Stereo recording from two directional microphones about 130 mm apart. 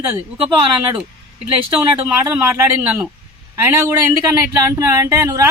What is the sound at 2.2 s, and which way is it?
Speech, 20° right (ahead or behind).